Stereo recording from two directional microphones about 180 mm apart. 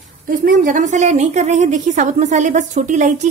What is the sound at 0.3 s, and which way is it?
A woman's voice, 45° right (ahead or behind).